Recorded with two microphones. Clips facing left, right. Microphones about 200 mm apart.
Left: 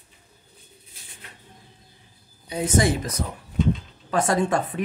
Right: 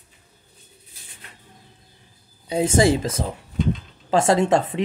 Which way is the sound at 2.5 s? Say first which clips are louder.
Right 4 dB; 30° right (ahead or behind).